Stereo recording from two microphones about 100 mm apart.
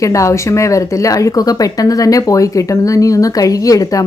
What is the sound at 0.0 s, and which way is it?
Speech, 30° left (ahead or behind).